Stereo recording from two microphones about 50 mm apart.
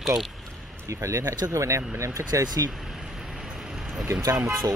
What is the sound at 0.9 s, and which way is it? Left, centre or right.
Speech, right.